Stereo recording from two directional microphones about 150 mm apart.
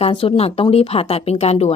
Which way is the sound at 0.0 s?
35° left (ahead or behind).